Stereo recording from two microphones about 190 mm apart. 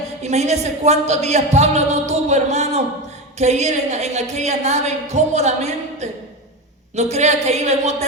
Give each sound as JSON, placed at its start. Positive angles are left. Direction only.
{"t": 0.2, "sound": "a woman's voice", "side_deg": -35}